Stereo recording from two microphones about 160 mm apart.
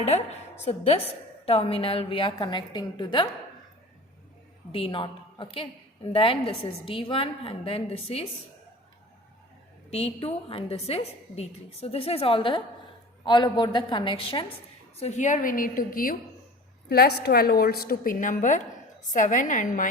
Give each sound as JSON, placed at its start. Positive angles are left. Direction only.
{"t": 0.0, "sound": "a woman's voice", "side_deg": 45}
{"t": 4.7, "sound": "a woman's voice", "side_deg": 35}
{"t": 9.9, "sound": "a woman's voice", "side_deg": 40}
{"t": 14.9, "sound": "a woman's voice", "side_deg": 45}
{"t": 16.9, "sound": "a woman's voice", "side_deg": 75}